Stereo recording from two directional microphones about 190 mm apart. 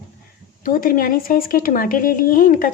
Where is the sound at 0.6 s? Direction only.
45° left (ahead or behind).